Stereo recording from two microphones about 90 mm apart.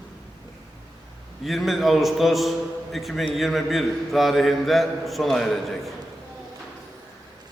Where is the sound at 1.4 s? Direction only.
Centre (ahead or behind).